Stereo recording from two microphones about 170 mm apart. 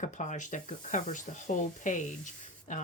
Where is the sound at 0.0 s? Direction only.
45° left (ahead or behind).